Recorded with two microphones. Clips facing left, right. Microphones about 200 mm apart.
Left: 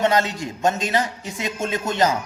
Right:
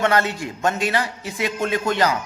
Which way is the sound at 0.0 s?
15° left (ahead or behind).